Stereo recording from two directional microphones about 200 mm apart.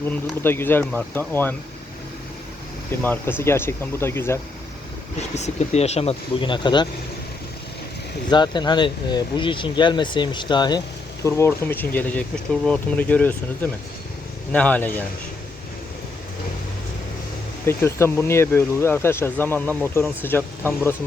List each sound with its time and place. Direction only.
0.4 s speech: 10° left (ahead or behind)
3.0 s speech: 10° left (ahead or behind)
5.3 s speech: 35° left (ahead or behind)
8.3 s speech: 20° left (ahead or behind)
17.7 s speech: 10° left (ahead or behind)